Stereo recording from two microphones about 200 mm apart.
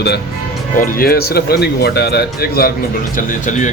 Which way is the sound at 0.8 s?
50° left (ahead or behind).